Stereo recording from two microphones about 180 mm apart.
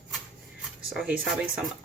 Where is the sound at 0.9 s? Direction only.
5° right (ahead or behind).